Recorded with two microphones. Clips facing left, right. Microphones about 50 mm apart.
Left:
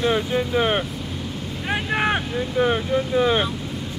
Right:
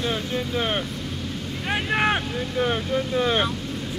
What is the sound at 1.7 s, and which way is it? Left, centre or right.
Speech, centre.